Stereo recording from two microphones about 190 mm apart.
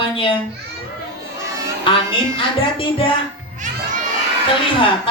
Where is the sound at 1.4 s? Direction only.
15° right (ahead or behind).